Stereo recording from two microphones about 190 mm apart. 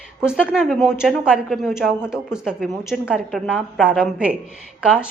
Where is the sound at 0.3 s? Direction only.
5° right (ahead or behind).